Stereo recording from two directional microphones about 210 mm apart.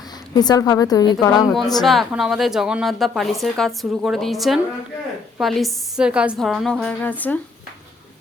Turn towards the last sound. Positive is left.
turn(degrees=10)  # may be behind; listen again after turning